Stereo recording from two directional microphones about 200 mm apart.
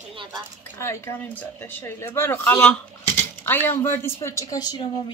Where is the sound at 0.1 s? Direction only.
25° right (ahead or behind).